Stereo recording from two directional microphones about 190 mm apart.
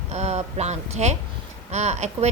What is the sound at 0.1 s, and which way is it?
Speech, 35° right (ahead or behind).